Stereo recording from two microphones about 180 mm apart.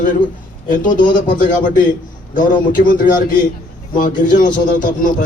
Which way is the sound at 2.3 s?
50° left (ahead or behind).